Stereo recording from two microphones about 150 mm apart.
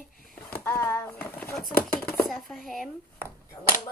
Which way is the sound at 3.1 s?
15° right (ahead or behind).